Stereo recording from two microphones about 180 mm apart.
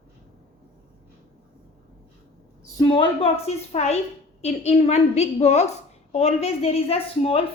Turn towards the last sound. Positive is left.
turn(degrees=35)  # may be behind; listen again after turning